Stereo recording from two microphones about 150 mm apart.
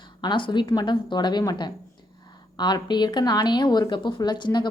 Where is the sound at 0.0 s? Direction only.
30° left (ahead or behind).